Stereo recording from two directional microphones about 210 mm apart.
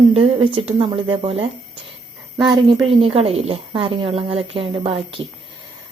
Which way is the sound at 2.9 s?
25° right (ahead or behind).